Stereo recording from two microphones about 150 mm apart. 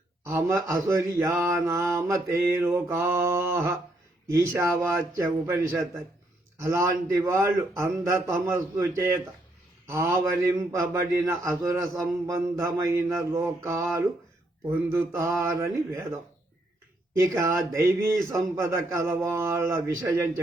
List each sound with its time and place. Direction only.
0.3 s mantra: 20° right (ahead or behind)
9.8 s speech: 20° right (ahead or behind)
10.2 s mantra: 20° right (ahead or behind)
17.2 s mantra: 20° right (ahead or behind)